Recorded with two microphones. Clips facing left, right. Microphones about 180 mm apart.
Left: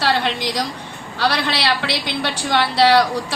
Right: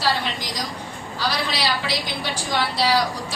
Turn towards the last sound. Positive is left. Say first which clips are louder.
# left 6 dB
turn(degrees=70)  # may be behind; listen again after turning